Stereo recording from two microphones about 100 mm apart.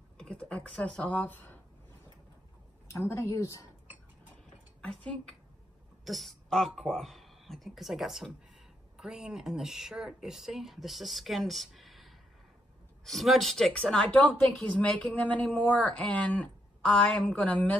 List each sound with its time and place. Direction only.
0.2 s speech: 10° left (ahead or behind)
2.9 s speech: 25° left (ahead or behind)
4.8 s a man's voice: 10° left (ahead or behind)